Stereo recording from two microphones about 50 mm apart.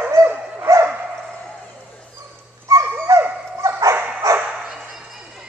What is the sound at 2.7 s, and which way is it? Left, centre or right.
Dog, right.